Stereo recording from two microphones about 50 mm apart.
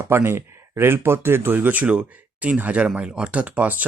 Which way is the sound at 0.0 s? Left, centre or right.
Right.